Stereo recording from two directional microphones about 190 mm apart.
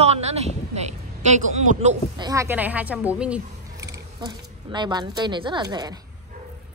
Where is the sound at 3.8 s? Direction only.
20° right (ahead or behind).